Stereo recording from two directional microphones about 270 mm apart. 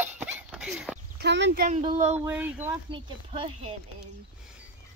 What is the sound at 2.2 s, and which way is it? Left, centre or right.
Speech, centre.